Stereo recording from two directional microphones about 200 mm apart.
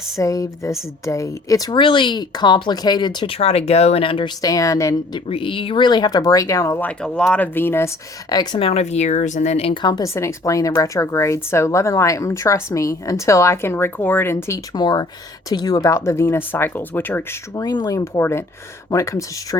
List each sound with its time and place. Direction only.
0.2 s a woman's voice: 15° left (ahead or behind)
5.3 s speech: 25° left (ahead or behind); by 7.9 s 10° left (ahead or behind)
8.3 s speech: 25° left (ahead or behind)